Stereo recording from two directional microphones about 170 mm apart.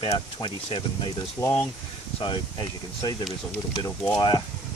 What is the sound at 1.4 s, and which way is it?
Speech, 15° left (ahead or behind).